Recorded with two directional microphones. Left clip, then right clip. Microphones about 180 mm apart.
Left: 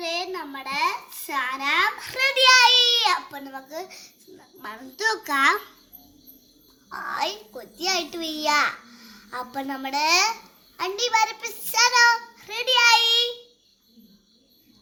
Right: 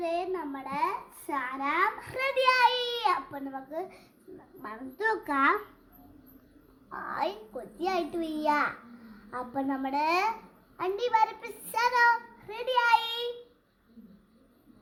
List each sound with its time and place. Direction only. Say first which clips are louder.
0.0 s a child's voice: left 2 dB; centre (ahead or behind)
6.9 s a child's voice: left 5 dB; centre (ahead or behind)